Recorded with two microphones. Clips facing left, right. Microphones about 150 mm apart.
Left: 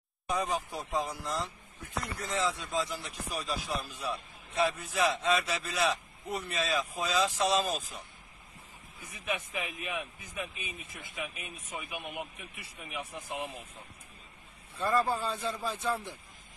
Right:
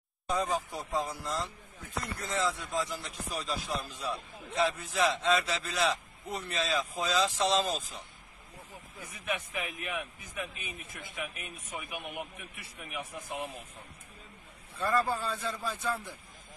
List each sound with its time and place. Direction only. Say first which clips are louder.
0.3 s a man's voice: right 1 dB; 15° left (ahead or behind)
9.3 s speech: even; 15° left (ahead or behind)
14.8 s speech: left 1 dB; 20° left (ahead or behind)